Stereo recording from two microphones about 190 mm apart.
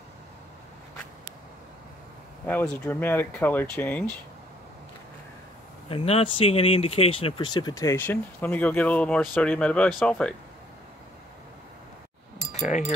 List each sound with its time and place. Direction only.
2.4 s speech: 5° left (ahead or behind)
5.9 s speech: 30° left (ahead or behind); by 10.3 s 5° left (ahead or behind)